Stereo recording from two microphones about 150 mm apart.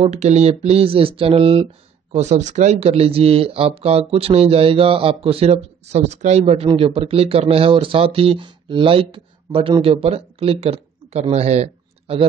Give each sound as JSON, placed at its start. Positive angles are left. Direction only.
{"t": 0.0, "sound": "speech", "side_deg": -45}
{"t": 2.1, "sound": "speech", "side_deg": -50}